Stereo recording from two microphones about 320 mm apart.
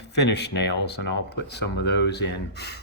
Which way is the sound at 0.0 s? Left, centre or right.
Left.